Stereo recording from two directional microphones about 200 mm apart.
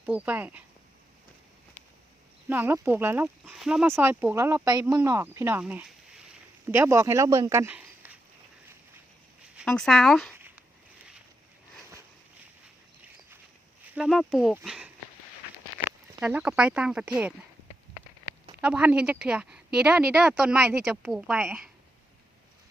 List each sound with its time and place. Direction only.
0.0 s speech: 5° right (ahead or behind)
2.5 s speech: 10° right (ahead or behind)
9.6 s speech: centre (ahead or behind)
13.9 s speech: centre (ahead or behind)
16.2 s speech: 5° right (ahead or behind)
18.3 s a sound: 55° right (ahead or behind)
18.6 s speech: 5° right (ahead or behind)